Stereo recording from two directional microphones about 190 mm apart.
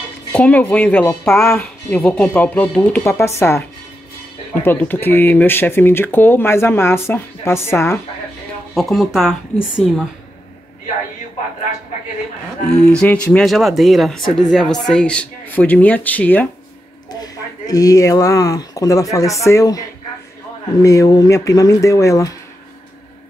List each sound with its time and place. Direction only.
0.3 s speech: 5° left (ahead or behind)
4.6 s speech: 10° left (ahead or behind)
8.7 s speech: centre (ahead or behind)
12.9 s speech: 5° left (ahead or behind)
17.1 s speech: 20° left (ahead or behind)
20.8 s speech: 15° left (ahead or behind)